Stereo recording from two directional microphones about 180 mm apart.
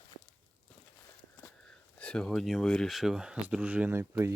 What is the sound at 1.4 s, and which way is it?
Speech, 5° left (ahead or behind).